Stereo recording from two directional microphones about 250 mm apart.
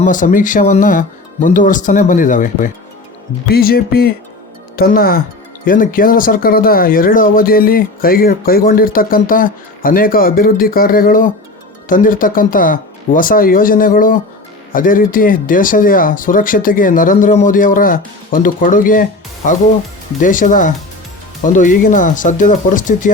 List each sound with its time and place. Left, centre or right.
0.0 s speech: left
20.2 s speech: left